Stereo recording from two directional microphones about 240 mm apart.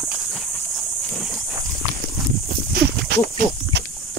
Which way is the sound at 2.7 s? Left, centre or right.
Right.